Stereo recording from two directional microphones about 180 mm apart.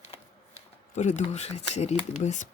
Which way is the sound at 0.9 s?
40° left (ahead or behind).